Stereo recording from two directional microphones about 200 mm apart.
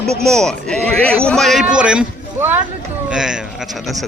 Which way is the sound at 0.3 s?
Centre (ahead or behind).